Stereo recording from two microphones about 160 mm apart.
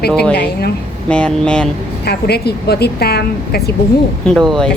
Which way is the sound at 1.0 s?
5° left (ahead or behind).